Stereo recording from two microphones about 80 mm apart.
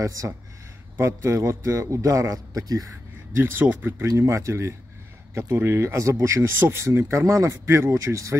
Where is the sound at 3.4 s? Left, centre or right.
Right.